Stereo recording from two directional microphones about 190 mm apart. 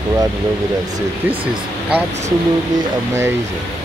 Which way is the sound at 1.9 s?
10° right (ahead or behind).